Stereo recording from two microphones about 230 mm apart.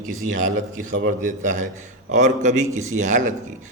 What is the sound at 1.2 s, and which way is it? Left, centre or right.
A man's voice, right.